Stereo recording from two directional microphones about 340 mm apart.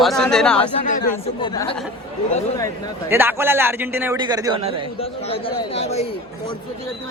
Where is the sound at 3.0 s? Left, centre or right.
Centre.